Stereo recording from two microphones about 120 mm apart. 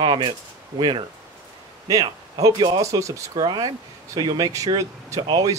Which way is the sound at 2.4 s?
40° right (ahead or behind).